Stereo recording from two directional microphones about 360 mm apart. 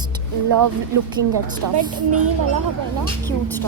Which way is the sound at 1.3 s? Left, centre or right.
Right.